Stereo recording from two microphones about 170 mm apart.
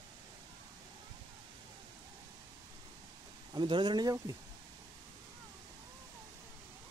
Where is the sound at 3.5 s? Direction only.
25° right (ahead or behind).